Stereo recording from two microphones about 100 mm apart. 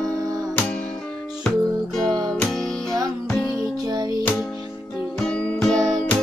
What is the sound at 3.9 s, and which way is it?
Music, 40° right (ahead or behind).